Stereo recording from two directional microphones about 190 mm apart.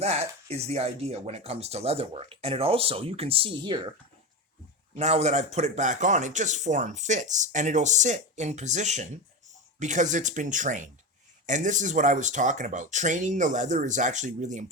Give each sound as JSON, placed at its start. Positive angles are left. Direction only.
{"t": 0.0, "sound": "speech", "side_deg": -35}
{"t": 4.9, "sound": "speech", "side_deg": -35}